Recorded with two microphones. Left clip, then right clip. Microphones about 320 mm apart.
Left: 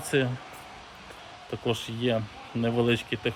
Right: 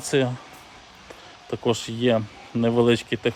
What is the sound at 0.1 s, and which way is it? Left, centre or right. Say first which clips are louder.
Speech: right 4 dB; centre.